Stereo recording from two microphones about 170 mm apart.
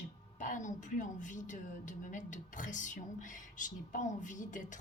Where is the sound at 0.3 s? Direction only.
45° left (ahead or behind).